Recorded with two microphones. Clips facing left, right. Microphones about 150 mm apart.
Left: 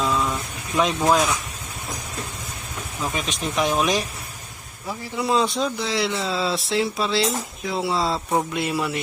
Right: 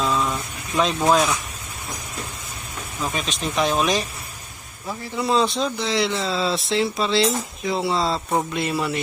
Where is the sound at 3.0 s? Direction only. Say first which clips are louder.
Even; 10° left (ahead or behind).